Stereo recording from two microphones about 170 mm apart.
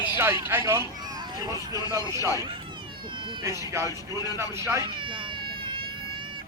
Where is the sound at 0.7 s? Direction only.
20° right (ahead or behind).